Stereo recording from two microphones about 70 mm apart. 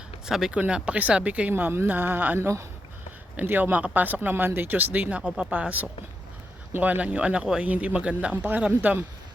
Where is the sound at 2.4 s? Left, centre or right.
Right.